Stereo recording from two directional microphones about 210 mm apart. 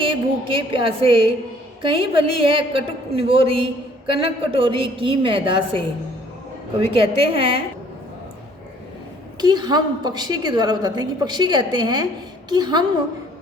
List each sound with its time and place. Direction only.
0.0 s music: 25° right (ahead or behind)
1.8 s a woman's voice: 25° right (ahead or behind)
6.9 s a woman's voice: 25° right (ahead or behind)
9.4 s a woman's voice: 20° right (ahead or behind)